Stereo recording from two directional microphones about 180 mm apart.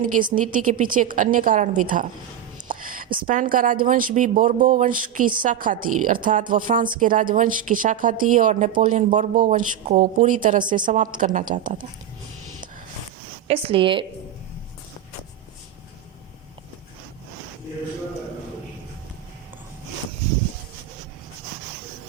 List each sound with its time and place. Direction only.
0.0 s a woman's voice: 50° right (ahead or behind)
2.6 s a sound: 50° right (ahead or behind)
3.2 s a woman's voice: 50° right (ahead or behind)
13.5 s a woman's voice: 30° right (ahead or behind)